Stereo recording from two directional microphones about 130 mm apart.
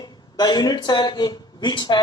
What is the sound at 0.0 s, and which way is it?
A man's voice, 35° left (ahead or behind).